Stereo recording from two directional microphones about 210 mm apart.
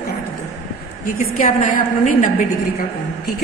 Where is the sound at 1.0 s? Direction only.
40° left (ahead or behind).